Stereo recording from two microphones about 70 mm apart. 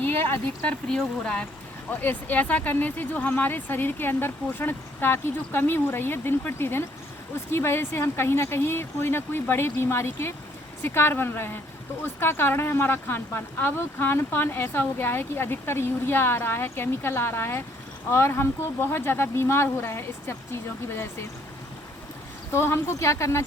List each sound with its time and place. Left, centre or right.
0.0 s a sound: left
0.6 s speech: centre
1.9 s speech: left
22.5 s speech: left